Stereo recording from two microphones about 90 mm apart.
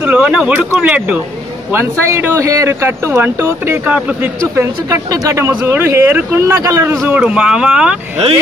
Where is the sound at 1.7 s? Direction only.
30° right (ahead or behind).